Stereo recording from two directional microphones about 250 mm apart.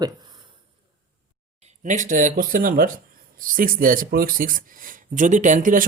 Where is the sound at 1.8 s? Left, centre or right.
Right.